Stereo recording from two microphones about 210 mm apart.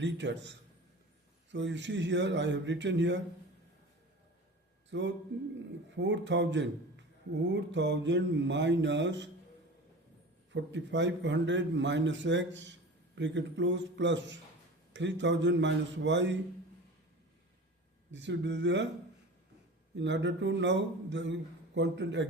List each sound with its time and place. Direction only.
0.0 s a man's voice: 60° right (ahead or behind)
1.5 s a man's voice: 60° right (ahead or behind)
4.9 s a sound: 60° right (ahead or behind)
6.0 s a man's voice: 60° right (ahead or behind)
10.5 s a man's voice: 60° right (ahead or behind)
18.1 s a man's voice: 60° right (ahead or behind)
20.0 s a man's voice: 60° right (ahead or behind)